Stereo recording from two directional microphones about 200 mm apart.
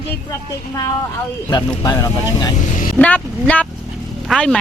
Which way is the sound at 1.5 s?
20° left (ahead or behind).